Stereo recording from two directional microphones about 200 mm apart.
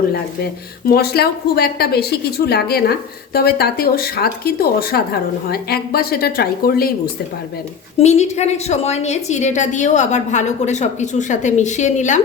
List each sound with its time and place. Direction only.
0.9 s speech: 50° left (ahead or behind)
7.9 s a woman's voice: 35° left (ahead or behind)